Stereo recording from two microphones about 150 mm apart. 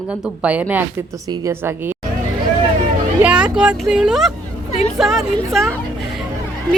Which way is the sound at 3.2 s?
10° right (ahead or behind).